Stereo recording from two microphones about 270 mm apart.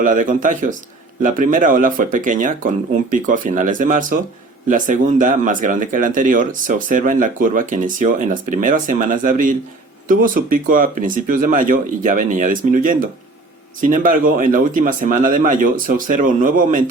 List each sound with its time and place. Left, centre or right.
0.0 s speech: right